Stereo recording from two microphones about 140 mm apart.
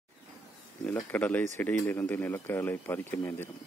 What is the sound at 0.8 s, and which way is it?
Speech, 10° left (ahead or behind).